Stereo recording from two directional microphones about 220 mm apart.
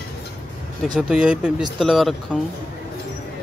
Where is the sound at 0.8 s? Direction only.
Centre (ahead or behind).